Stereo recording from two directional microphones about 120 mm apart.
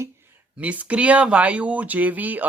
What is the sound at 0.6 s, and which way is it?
Speech, 10° right (ahead or behind).